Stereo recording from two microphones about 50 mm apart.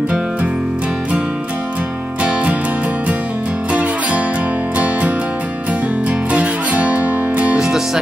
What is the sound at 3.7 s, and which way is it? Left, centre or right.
Music, right.